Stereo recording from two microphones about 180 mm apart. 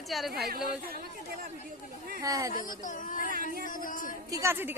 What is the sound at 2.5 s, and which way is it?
Speech, 50° left (ahead or behind).